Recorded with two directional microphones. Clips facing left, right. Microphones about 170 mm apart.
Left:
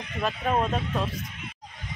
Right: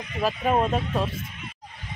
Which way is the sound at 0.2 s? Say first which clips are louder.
Right 3 dB; 5° right (ahead or behind).